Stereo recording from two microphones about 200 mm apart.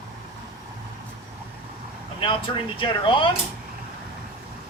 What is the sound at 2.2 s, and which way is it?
Speech, 25° left (ahead or behind).